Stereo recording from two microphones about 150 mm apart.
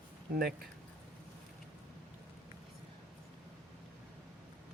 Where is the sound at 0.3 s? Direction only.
90° right.